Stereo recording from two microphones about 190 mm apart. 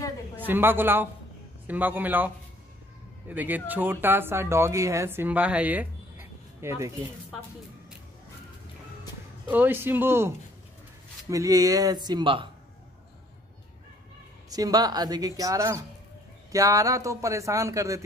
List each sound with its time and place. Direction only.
0.5 s speech: 10° right (ahead or behind)
9.5 s a woman's voice: 10° right (ahead or behind); by 12.4 s 25° right (ahead or behind)
14.5 s a woman's voice: 20° right (ahead or behind)